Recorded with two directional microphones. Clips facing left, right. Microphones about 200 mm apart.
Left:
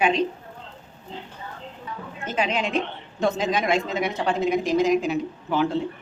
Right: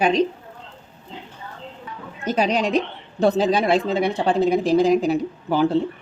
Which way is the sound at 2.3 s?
40° right (ahead or behind).